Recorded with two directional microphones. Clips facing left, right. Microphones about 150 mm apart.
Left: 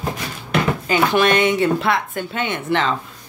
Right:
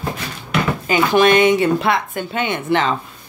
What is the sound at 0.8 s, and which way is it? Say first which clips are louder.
Speech: right 4 dB; 15° right (ahead or behind).